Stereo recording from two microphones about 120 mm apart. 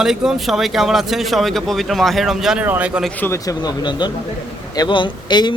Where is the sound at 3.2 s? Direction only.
20° left (ahead or behind).